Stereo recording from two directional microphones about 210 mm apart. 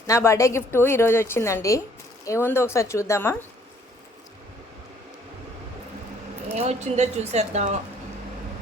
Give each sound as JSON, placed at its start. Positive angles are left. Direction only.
{"t": 0.1, "sound": "a woman's voice", "side_deg": 15}
{"t": 6.6, "sound": "a woman's voice", "side_deg": -35}